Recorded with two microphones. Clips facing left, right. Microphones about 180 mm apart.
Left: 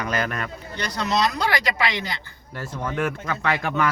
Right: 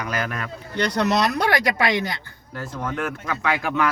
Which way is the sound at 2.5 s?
Centre (ahead or behind).